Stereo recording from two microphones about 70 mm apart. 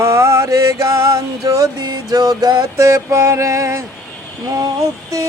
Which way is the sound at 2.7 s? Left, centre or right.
Right.